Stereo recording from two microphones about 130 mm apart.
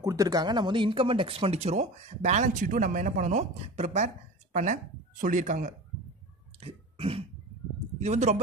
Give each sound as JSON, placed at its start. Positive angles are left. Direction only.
{"t": 0.0, "sound": "speech", "side_deg": -25}
{"t": 5.2, "sound": "speech", "side_deg": -85}
{"t": 6.6, "sound": "throat clearing", "side_deg": -50}
{"t": 8.0, "sound": "speech", "side_deg": -60}